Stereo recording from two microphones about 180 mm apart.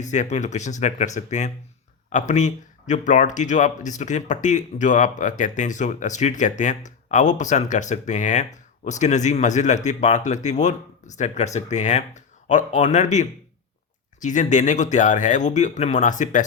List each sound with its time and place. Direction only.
0.0 s speech: 40° left (ahead or behind)